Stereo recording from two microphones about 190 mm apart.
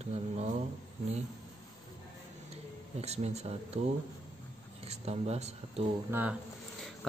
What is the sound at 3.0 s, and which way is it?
Speech, 35° right (ahead or behind).